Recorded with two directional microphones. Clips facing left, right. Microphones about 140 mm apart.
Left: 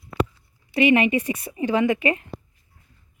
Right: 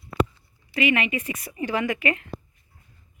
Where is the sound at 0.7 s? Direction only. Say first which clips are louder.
Left 6 dB; 30° left (ahead or behind).